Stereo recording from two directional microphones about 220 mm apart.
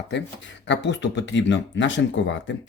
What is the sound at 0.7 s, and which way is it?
Speech, 55° left (ahead or behind).